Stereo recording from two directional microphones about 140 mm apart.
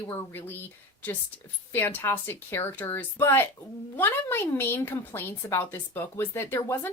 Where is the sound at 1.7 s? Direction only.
15° left (ahead or behind).